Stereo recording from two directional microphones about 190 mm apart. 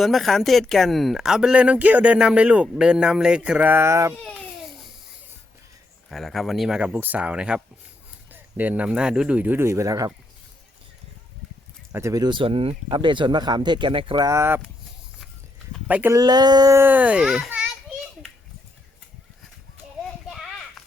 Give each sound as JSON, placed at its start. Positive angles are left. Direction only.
{"t": 0.0, "sound": "speech", "side_deg": 0}
{"t": 4.2, "sound": "speech", "side_deg": 5}
{"t": 6.1, "sound": "speech", "side_deg": 0}
{"t": 11.9, "sound": "speech", "side_deg": -15}
{"t": 15.9, "sound": "a child's voice", "side_deg": -10}
{"t": 20.2, "sound": "a sound", "side_deg": 0}